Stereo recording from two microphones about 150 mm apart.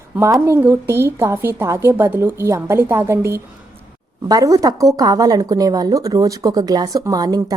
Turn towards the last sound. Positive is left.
turn(degrees=-25)  # may be behind; listen again after turning